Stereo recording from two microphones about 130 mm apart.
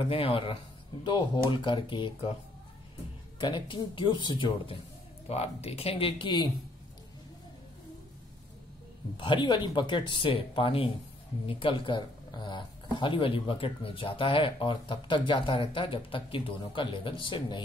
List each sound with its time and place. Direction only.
0.1 s speech: 45° left (ahead or behind)
3.3 s speech: 35° left (ahead or behind)
5.3 s speech: 50° left (ahead or behind)
9.1 s speech: 40° left (ahead or behind)